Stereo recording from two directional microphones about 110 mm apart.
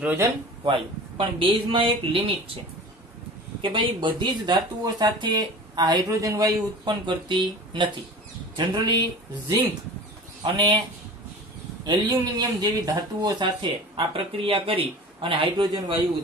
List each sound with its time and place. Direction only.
0.0 s speech: 15° right (ahead or behind)
0.7 s speech: 55° right (ahead or behind)
3.7 s speech: 45° right (ahead or behind)
10.4 s speech: 50° right (ahead or behind)
11.8 s speech: 35° right (ahead or behind)